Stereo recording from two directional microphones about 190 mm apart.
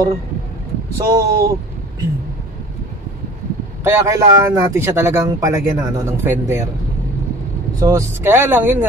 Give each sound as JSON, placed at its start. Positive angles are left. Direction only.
{"t": 0.9, "sound": "speech", "side_deg": -20}
{"t": 3.8, "sound": "speech", "side_deg": -15}
{"t": 7.8, "sound": "speech", "side_deg": -15}